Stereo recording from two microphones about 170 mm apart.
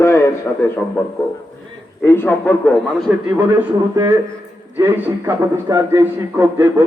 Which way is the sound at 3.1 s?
10° right (ahead or behind).